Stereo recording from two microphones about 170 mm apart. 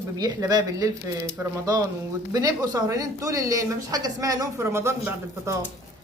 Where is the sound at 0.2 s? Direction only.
20° right (ahead or behind).